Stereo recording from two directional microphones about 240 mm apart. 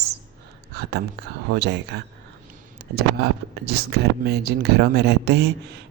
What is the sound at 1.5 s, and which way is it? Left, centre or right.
Speech, right.